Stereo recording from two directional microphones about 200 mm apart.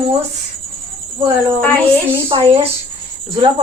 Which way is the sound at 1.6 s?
5° left (ahead or behind).